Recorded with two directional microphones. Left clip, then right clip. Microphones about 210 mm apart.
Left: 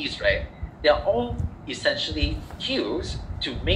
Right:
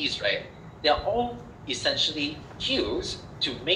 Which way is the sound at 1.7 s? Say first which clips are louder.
Left 1 dB; 25° left (ahead or behind).